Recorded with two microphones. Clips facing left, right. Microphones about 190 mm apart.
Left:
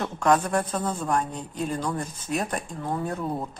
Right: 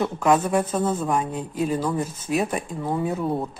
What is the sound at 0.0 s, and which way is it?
Speech, 5° right (ahead or behind).